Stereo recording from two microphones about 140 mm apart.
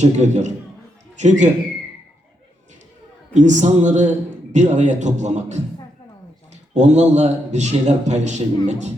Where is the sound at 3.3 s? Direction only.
60° right (ahead or behind).